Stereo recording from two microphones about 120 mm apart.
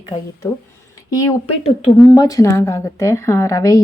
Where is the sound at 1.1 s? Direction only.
25° left (ahead or behind).